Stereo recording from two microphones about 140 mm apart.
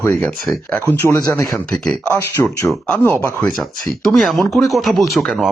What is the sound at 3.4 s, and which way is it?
Speech, centre (ahead or behind).